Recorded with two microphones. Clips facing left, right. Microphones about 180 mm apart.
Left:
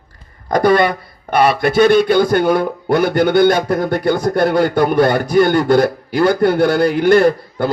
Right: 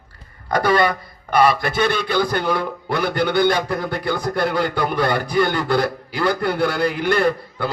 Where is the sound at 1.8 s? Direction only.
50° left (ahead or behind).